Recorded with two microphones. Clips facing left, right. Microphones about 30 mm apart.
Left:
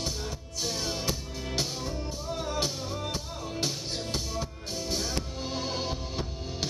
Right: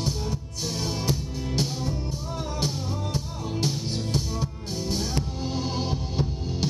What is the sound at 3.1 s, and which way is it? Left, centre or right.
Music, centre.